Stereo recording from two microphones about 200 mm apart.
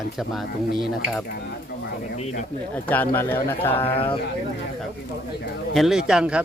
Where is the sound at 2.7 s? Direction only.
10° left (ahead or behind).